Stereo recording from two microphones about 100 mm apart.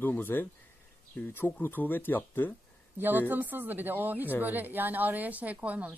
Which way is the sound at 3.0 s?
20° right (ahead or behind).